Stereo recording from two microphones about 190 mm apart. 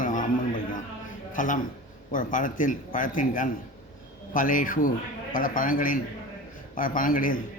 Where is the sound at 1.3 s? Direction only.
40° left (ahead or behind).